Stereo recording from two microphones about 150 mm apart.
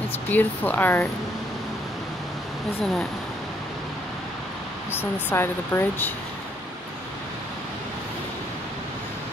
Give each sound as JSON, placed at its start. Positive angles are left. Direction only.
{"t": 0.3, "sound": "speech", "side_deg": 10}
{"t": 4.9, "sound": "speech", "side_deg": 15}